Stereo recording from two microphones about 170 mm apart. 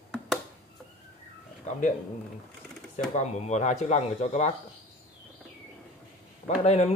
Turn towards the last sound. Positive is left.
turn(degrees=40)  # may be behind; listen again after turning